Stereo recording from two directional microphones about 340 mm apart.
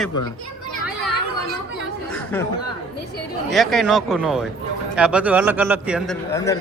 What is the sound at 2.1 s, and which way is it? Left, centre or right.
Chatter, centre.